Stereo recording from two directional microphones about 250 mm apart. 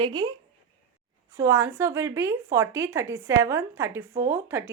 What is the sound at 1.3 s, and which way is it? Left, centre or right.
A woman's voice, centre.